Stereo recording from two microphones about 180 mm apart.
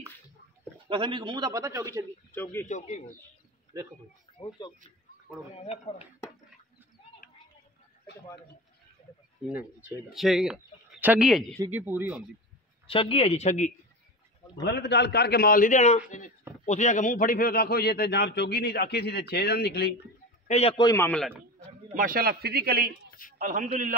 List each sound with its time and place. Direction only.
0.8 s a man's voice: 25° right (ahead or behind)
2.3 s a man's voice: 15° left (ahead or behind)
2.7 s speech: 40° left (ahead or behind)
4.4 s speech: 25° left (ahead or behind)
5.6 s speech: 35° left (ahead or behind)
9.5 s speech: 10° right (ahead or behind)
12.8 s speech: 30° left (ahead or behind)
14.6 s a man's voice: 70° left (ahead or behind)
20.4 s a man's voice: 35° left (ahead or behind)
20.8 s a man's voice: 15° left (ahead or behind)
21.9 s a man's voice: 50° right (ahead or behind)
23.3 s a man's voice: 45° right (ahead or behind)